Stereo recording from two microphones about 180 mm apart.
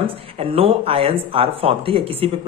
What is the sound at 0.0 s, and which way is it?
Speech, 30° right (ahead or behind).